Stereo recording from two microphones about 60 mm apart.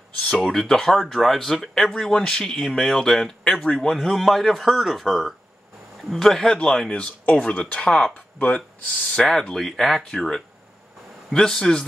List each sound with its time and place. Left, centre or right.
0.4 s speech: centre; by 8.6 s left
9.3 s speech: centre